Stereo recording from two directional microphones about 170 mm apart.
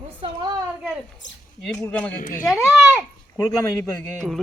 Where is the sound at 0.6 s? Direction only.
10° right (ahead or behind).